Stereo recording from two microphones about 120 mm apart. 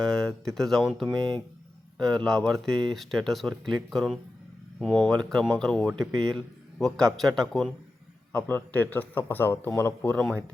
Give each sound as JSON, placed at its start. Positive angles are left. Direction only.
{"t": 0.0, "sound": "speech", "side_deg": 5}
{"t": 8.3, "sound": "a man's voice", "side_deg": 15}
{"t": 10.2, "sound": "speech", "side_deg": 5}